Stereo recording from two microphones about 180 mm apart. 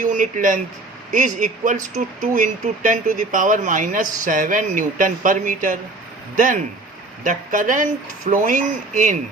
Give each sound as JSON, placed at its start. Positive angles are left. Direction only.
{"t": 0.0, "sound": "speech", "side_deg": -45}